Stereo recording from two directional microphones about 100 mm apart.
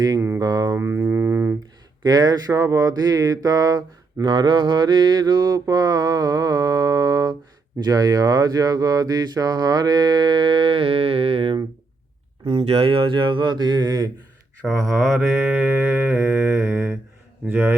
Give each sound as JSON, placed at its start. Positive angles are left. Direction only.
{"t": 0.3, "sound": "speech", "side_deg": -40}
{"t": 0.8, "sound": "music", "side_deg": -25}
{"t": 2.0, "sound": "a sound", "side_deg": -45}
{"t": 7.8, "sound": "speech", "side_deg": -40}
{"t": 12.5, "sound": "speech", "side_deg": -80}
{"t": 14.8, "sound": "mantra", "side_deg": 5}
{"t": 17.4, "sound": "speech", "side_deg": -20}